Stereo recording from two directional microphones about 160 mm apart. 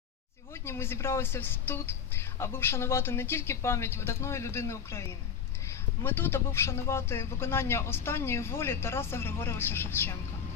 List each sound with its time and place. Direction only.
0.5 s speech: 15° left (ahead or behind)